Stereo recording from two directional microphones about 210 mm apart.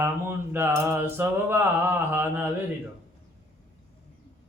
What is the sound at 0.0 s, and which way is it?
Mantra, 10° right (ahead or behind).